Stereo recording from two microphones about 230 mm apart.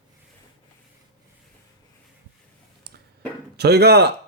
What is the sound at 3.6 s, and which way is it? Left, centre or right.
Speech, right.